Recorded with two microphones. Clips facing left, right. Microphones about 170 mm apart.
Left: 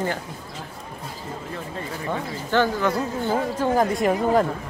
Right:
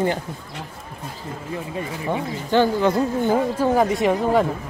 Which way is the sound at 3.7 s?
5° right (ahead or behind).